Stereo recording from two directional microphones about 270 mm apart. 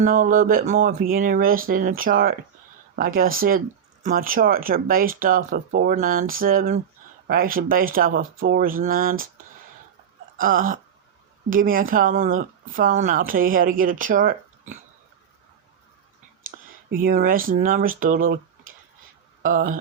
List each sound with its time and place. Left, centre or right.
0.0 s speech: right
10.3 s speech: right
16.9 s speech: right
19.4 s speech: right